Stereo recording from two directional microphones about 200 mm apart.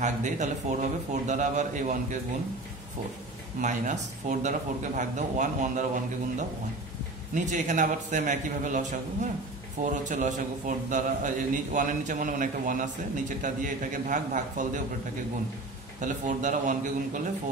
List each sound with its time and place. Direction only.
0.0 s a man's voice: 35° right (ahead or behind)
3.6 s a man's voice: 35° right (ahead or behind)
7.3 s a man's voice: 35° right (ahead or behind)
16.0 s a man's voice: 40° right (ahead or behind)